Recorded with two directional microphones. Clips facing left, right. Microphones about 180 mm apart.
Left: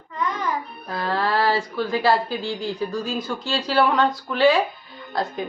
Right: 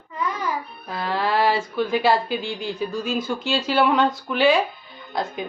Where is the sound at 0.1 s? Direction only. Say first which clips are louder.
Left 1 dB; 10° right (ahead or behind).